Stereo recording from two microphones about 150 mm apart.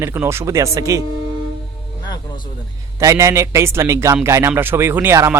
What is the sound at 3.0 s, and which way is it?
Speech, 20° right (ahead or behind).